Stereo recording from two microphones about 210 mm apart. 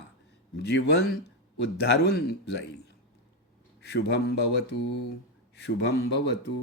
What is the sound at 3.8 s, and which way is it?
Speech, 55° left (ahead or behind).